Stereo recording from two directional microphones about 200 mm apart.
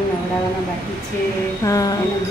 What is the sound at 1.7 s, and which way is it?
Speech, 15° left (ahead or behind).